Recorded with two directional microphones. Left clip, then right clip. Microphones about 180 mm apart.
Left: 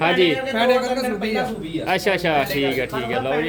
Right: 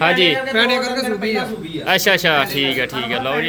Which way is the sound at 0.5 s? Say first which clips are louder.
Right 2 dB; 75° left (ahead or behind).